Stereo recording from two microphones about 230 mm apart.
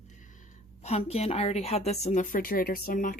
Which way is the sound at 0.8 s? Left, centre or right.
Left.